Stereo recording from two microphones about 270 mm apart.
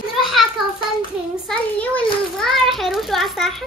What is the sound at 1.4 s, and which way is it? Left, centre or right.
A child's voice, centre.